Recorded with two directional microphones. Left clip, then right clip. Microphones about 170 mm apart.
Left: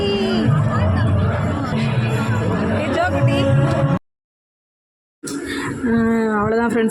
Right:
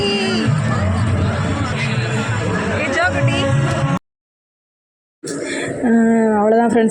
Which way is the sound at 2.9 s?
5° right (ahead or behind).